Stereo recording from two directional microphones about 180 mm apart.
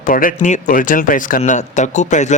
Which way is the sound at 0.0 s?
50° left (ahead or behind).